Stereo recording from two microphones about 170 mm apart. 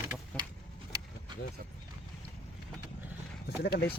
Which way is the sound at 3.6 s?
65° left (ahead or behind).